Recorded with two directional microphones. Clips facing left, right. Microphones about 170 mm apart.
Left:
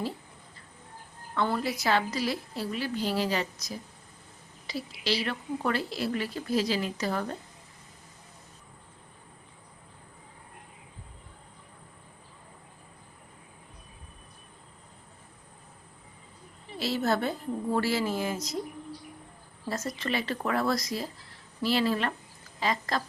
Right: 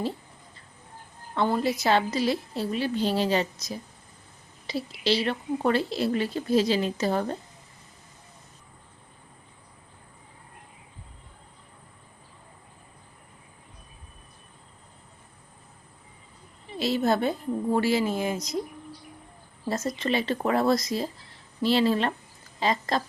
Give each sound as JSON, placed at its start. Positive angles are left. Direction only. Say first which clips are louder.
{"t": 1.4, "sound": "a woman's voice", "louder": "right 4 dB", "side_deg": -20}
{"t": 16.7, "sound": "a woman's voice", "louder": "right 4 dB", "side_deg": -20}
{"t": 19.6, "sound": "a woman's voice", "louder": "right 5 dB", "side_deg": -20}